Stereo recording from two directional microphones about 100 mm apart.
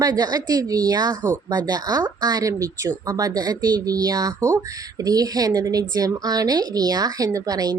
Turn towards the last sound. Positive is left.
turn(degrees=-40)  # may be behind; listen again after turning